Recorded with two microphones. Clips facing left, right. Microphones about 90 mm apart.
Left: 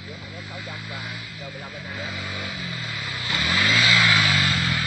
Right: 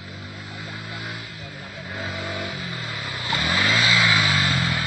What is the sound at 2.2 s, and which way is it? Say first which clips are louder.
Vehicle: right 3 dB; 35° right (ahead or behind).